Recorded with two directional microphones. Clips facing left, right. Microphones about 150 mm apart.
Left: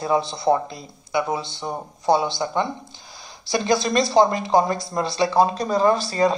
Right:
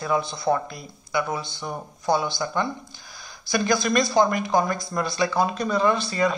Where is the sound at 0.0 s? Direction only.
30° left (ahead or behind).